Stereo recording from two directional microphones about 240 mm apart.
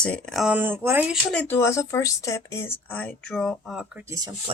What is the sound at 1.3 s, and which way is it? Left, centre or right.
Speech, centre.